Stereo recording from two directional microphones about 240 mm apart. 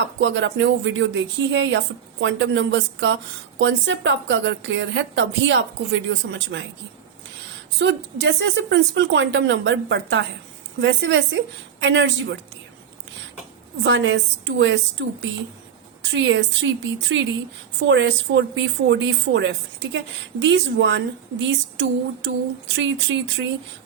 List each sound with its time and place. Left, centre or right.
0.2 s a woman's voice: right
7.8 s a woman's voice: right
13.8 s a woman's voice: right
16.0 s a woman's voice: right